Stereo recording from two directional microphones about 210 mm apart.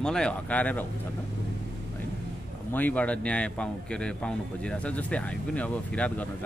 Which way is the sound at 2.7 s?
10° left (ahead or behind).